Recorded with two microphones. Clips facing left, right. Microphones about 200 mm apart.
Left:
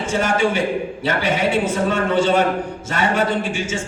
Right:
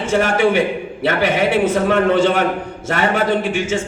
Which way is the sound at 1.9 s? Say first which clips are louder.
Right 2 dB; 60° right (ahead or behind).